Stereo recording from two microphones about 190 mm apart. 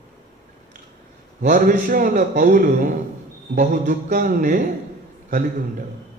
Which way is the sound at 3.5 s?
40° right (ahead or behind).